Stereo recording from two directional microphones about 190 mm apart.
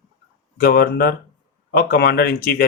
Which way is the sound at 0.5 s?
50° left (ahead or behind).